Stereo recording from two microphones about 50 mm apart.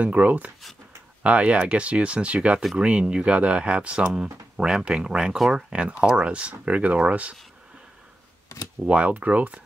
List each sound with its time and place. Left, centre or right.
0.0 s speech: right
8.8 s speech: right